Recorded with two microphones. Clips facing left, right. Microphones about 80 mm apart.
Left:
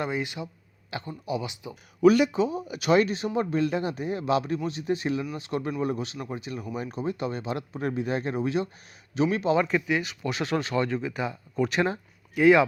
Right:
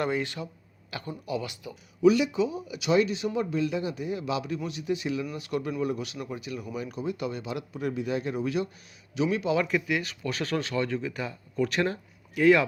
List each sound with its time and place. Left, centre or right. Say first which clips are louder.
0.0 s speech: right 1 dB; centre
2.0 s speech: left 2 dB; left
12.3 s speech: left 2 dB; left